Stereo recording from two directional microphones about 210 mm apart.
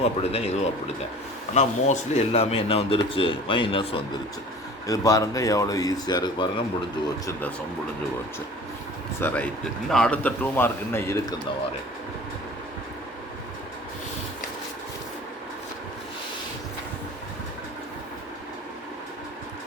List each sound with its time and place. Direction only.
0.0 s speech: 30° left (ahead or behind)
1.5 s speech: 30° left (ahead or behind)
9.2 s speech: 5° left (ahead or behind)